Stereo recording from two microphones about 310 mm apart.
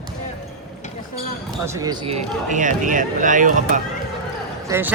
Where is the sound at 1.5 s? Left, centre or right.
Centre.